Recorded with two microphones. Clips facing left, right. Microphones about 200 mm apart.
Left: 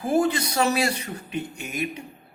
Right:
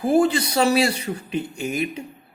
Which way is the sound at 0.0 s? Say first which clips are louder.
Right 4 dB; 30° right (ahead or behind).